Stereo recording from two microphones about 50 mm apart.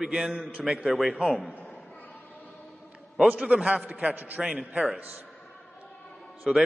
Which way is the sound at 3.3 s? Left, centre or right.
Right.